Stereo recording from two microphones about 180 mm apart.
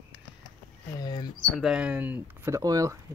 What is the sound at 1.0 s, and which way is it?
Speech, 25° left (ahead or behind).